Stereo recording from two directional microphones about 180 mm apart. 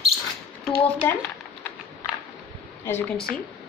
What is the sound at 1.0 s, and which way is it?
Speech, 10° left (ahead or behind).